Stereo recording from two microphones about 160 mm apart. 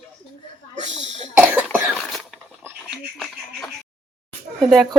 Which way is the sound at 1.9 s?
5° left (ahead or behind).